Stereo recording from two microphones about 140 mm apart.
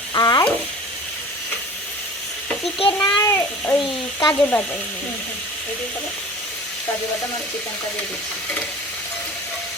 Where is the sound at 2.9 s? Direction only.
20° left (ahead or behind).